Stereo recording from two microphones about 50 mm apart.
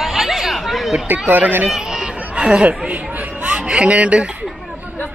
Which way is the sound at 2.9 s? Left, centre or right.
Right.